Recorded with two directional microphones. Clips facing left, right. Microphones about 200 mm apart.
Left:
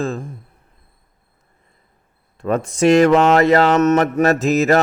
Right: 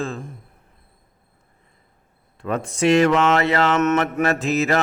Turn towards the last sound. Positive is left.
turn(degrees=40)  # may be behind; listen again after turning